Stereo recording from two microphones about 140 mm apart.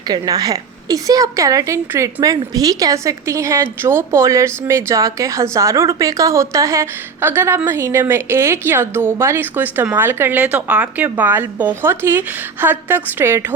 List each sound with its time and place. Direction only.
0.1 s a woman's voice: 25° right (ahead or behind)